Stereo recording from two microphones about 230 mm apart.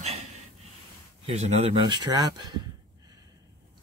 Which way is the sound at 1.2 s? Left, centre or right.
Right.